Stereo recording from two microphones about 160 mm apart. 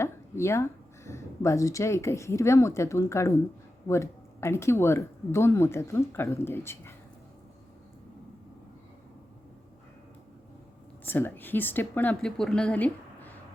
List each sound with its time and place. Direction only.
0.0 s speech: 15° left (ahead or behind)
11.0 s speech: 10° left (ahead or behind)